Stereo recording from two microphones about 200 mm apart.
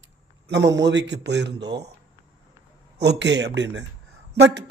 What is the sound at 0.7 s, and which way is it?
Speech, 60° right (ahead or behind).